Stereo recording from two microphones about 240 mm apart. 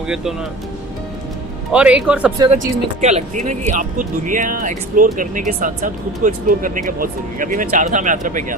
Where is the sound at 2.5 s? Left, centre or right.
Right.